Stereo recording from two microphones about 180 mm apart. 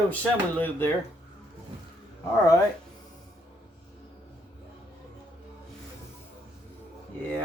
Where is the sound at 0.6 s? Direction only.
10° left (ahead or behind).